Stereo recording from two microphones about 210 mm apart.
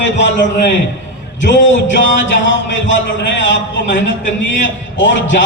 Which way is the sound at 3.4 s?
60° left (ahead or behind).